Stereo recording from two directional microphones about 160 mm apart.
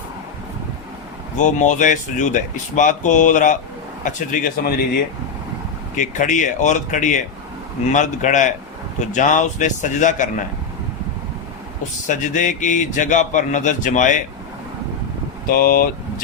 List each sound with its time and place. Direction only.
1.4 s a man's voice: 50° left (ahead or behind)
6.0 s speech: 50° left (ahead or behind)
12.0 s speech: 50° left (ahead or behind)
15.4 s speech: 65° left (ahead or behind)